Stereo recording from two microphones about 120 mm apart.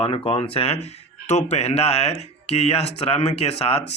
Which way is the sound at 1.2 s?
70° left (ahead or behind).